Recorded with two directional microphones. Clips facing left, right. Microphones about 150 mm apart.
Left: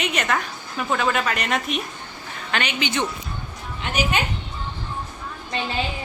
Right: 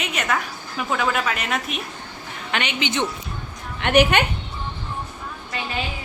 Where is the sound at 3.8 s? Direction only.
65° right (ahead or behind).